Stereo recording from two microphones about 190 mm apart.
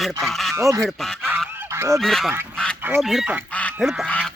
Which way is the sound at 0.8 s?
Centre (ahead or behind).